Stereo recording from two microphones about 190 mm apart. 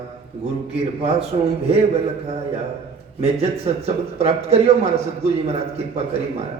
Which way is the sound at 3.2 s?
35° right (ahead or behind).